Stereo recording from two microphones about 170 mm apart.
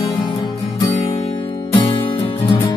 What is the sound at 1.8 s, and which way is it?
Music, 30° left (ahead or behind).